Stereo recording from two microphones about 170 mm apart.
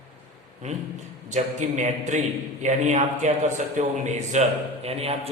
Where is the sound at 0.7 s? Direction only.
45° right (ahead or behind).